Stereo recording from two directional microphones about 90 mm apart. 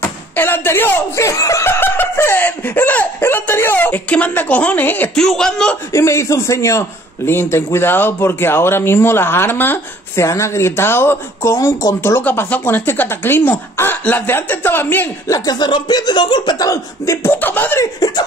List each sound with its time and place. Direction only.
0.4 s a man's voice: 25° left (ahead or behind)
5.1 s a man's voice: 5° left (ahead or behind)
5.9 s a man's voice: 35° left (ahead or behind)
15.2 s speech: 45° left (ahead or behind); by 17.7 s 20° left (ahead or behind)
17.7 s speech: 40° left (ahead or behind)